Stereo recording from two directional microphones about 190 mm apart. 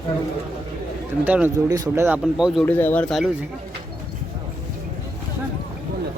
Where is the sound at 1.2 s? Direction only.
10° right (ahead or behind).